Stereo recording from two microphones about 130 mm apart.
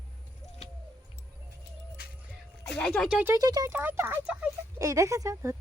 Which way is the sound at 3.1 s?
10° right (ahead or behind).